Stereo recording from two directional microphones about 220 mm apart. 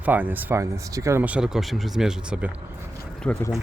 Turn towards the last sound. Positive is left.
turn(degrees=5)  # may be behind; listen again after turning